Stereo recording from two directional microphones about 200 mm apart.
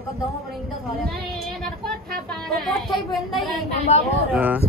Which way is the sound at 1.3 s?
Centre (ahead or behind).